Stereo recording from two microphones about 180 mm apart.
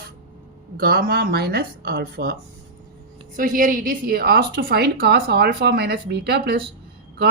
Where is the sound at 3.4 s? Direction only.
50° right (ahead or behind).